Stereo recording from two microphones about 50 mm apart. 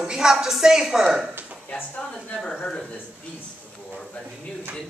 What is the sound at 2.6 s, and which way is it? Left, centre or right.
Speech, centre.